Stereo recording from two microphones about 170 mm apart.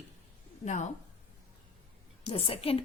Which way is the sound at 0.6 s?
45° left (ahead or behind).